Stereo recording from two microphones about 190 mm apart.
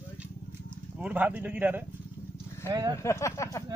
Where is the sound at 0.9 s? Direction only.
5° right (ahead or behind).